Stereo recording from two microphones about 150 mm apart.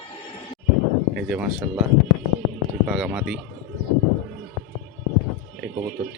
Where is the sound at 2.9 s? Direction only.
Centre (ahead or behind).